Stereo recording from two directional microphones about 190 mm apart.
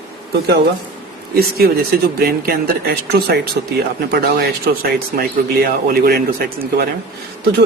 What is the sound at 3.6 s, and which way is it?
A man's voice, 60° right (ahead or behind).